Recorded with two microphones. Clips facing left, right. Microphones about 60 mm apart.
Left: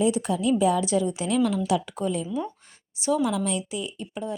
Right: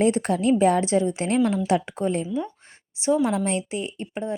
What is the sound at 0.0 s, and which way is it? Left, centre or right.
Speech, right.